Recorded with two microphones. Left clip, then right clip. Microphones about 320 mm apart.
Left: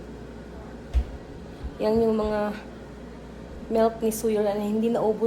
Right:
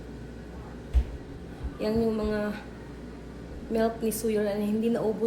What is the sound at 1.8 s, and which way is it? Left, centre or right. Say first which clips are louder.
Speech: left 5 dB; centre.